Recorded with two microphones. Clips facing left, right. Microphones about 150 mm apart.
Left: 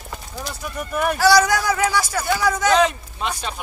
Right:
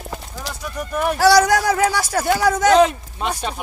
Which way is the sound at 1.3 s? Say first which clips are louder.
Right 2 dB; 40° right (ahead or behind).